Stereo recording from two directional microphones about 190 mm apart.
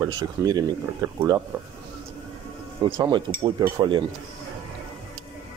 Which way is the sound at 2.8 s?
25° right (ahead or behind).